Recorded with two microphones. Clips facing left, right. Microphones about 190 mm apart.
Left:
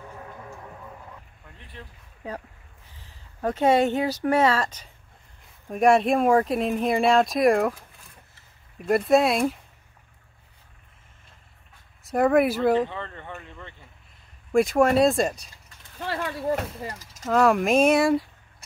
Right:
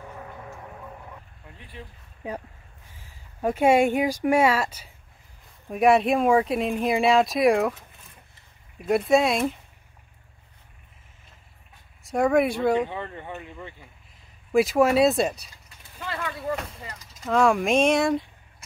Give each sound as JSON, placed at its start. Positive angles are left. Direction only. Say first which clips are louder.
{"t": 1.6, "sound": "speech", "louder": "right 2 dB", "side_deg": -5}
{"t": 12.0, "sound": "speech", "louder": "left 1 dB", "side_deg": 0}
{"t": 12.7, "sound": "speech", "louder": "left 1 dB", "side_deg": -15}
{"t": 16.0, "sound": "speech", "louder": "left 3 dB", "side_deg": 35}
{"t": 17.2, "sound": "speech", "louder": "left 1 dB", "side_deg": 0}